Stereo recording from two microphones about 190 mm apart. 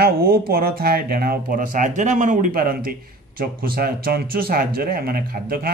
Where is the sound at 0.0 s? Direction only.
50° right (ahead or behind).